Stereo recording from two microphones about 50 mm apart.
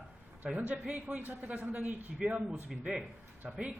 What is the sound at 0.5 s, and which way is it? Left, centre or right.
A man's voice, right.